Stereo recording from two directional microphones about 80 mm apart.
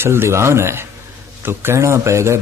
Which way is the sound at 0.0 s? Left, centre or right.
Right.